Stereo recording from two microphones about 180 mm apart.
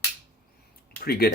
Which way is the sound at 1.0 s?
60° left (ahead or behind).